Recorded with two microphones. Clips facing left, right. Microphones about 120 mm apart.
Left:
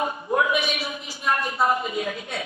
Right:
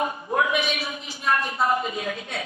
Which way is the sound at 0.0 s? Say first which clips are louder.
Left 1 dB; 30° left (ahead or behind).